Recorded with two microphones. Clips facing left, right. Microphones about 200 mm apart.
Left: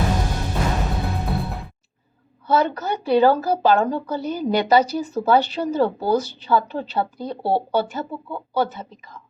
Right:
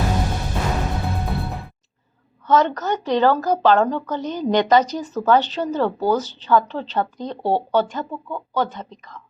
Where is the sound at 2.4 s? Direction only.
10° left (ahead or behind).